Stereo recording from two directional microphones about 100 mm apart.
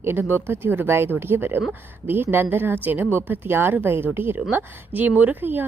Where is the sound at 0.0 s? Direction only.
20° right (ahead or behind).